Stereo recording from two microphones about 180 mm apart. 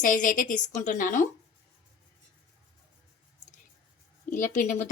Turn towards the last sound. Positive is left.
turn(degrees=45)  # may be behind; listen again after turning